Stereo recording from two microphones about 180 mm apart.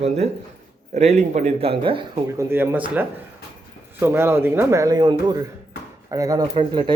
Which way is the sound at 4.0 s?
15° right (ahead or behind).